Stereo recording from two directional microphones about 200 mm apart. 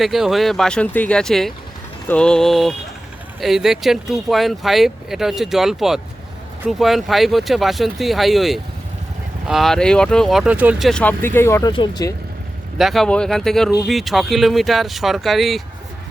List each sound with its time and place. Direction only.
0.0 s speech: centre (ahead or behind); by 12.1 s 20° left (ahead or behind)
12.7 s speech: centre (ahead or behind)